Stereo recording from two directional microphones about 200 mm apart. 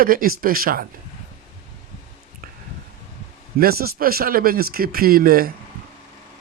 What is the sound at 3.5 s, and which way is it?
Speech, 50° right (ahead or behind).